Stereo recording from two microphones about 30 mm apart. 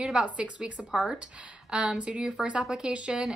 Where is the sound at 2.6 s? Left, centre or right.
Right.